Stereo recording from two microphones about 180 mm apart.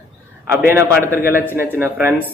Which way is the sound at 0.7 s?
15° right (ahead or behind).